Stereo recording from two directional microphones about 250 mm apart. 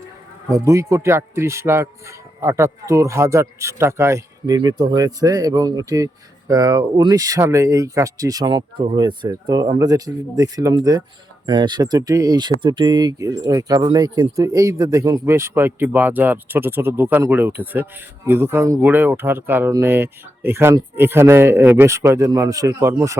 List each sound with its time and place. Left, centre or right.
0.5 s speech: centre